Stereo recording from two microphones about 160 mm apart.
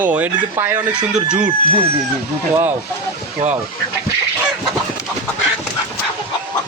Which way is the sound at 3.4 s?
50° right (ahead or behind).